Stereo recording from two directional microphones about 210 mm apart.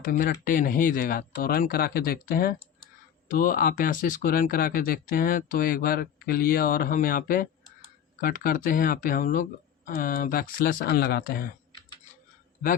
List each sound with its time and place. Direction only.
0.0 s speech: 40° left (ahead or behind)